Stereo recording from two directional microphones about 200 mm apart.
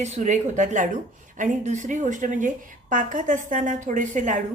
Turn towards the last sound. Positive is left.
turn(degrees=-40)  # may be behind; listen again after turning